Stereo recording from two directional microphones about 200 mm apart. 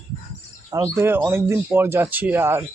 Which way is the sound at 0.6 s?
20° right (ahead or behind).